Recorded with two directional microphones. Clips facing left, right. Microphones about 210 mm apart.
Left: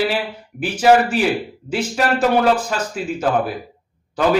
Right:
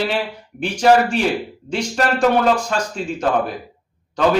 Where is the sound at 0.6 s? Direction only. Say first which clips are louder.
Even; 5° left (ahead or behind).